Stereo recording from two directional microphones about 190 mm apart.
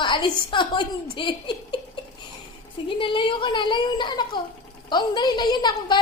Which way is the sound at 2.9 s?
25° left (ahead or behind).